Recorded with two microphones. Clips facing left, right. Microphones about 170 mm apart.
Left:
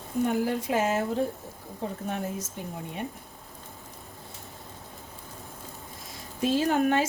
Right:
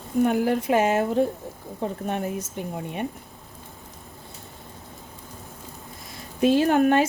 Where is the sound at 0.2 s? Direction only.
60° right (ahead or behind).